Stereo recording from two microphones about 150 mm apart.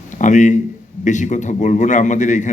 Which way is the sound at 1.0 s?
55° left (ahead or behind).